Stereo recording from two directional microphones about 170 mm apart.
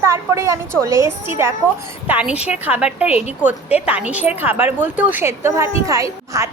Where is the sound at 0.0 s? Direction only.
15° right (ahead or behind).